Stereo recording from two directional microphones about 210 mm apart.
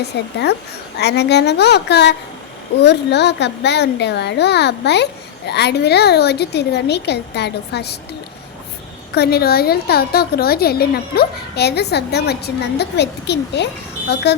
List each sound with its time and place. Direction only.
0.0 s a woman's voice: 55° left (ahead or behind)
9.1 s a woman's voice: 50° left (ahead or behind)